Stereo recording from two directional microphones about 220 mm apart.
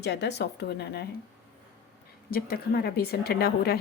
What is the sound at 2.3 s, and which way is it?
Speech, 45° left (ahead or behind).